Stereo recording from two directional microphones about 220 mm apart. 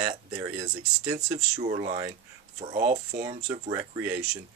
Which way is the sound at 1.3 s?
30° right (ahead or behind).